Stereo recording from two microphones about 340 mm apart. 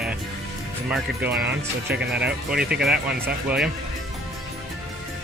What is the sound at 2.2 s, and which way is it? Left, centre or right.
Speech, centre.